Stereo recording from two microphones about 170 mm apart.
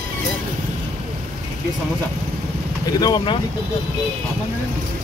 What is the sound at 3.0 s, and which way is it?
Speech, 25° left (ahead or behind).